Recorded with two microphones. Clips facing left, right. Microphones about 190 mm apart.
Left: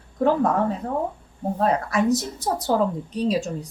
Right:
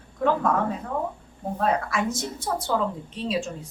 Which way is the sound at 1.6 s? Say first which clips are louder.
Left 3 dB; 40° left (ahead or behind).